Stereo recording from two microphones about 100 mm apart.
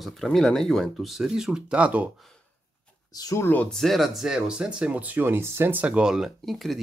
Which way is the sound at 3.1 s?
40° left (ahead or behind).